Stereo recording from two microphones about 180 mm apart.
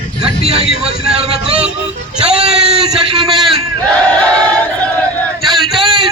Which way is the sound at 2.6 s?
5° right (ahead or behind).